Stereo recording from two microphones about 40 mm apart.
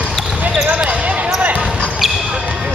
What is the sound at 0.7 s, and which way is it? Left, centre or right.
Basketball bounce, right.